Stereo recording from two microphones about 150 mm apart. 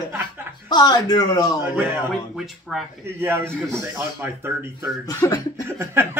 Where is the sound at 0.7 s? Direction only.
25° left (ahead or behind).